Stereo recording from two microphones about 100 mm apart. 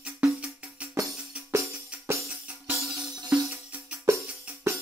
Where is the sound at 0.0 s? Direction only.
15° right (ahead or behind).